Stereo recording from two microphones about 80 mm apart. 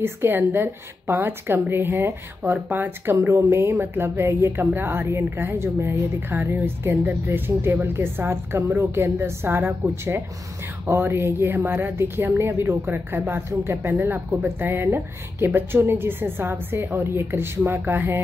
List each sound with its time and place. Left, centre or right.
0.0 s speech: right